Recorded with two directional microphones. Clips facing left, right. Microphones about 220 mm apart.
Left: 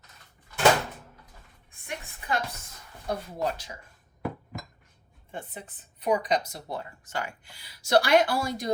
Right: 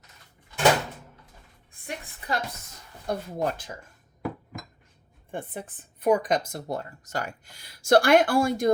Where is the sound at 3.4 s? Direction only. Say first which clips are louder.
Right 2 dB; 55° right (ahead or behind).